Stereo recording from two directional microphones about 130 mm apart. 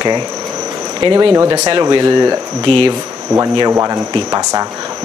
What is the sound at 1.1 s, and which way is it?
A man's voice, 30° right (ahead or behind).